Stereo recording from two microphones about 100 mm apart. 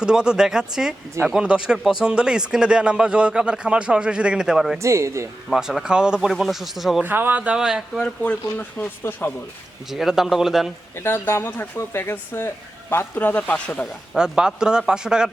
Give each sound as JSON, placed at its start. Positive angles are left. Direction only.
{"t": 0.0, "sound": "speech", "side_deg": -10}
{"t": 4.8, "sound": "a man's voice", "side_deg": -30}
{"t": 5.5, "sound": "speech", "side_deg": -5}
{"t": 7.0, "sound": "speech", "side_deg": -20}
{"t": 7.9, "sound": "speech", "side_deg": 10}
{"t": 9.9, "sound": "speech", "side_deg": -5}
{"t": 10.9, "sound": "speech", "side_deg": 25}
{"t": 14.1, "sound": "speech", "side_deg": -5}